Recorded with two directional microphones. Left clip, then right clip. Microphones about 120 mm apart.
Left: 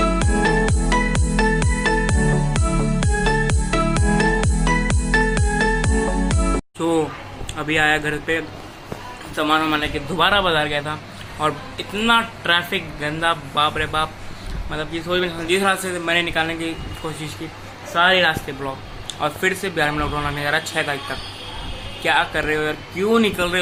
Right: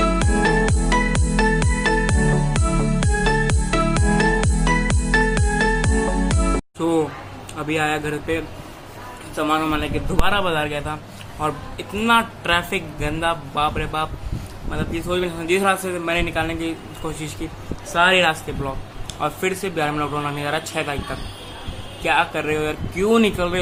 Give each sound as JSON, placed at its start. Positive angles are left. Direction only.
{"t": 0.0, "sound": "music", "side_deg": -5}
{"t": 7.5, "sound": "speech", "side_deg": -5}
{"t": 9.8, "sound": "speech", "side_deg": -5}
{"t": 15.0, "sound": "speech", "side_deg": -25}